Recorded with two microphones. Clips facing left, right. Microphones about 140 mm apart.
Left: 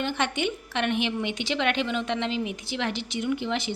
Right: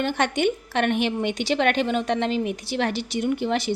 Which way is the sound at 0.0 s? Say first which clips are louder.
Right 5 dB; 50° right (ahead or behind).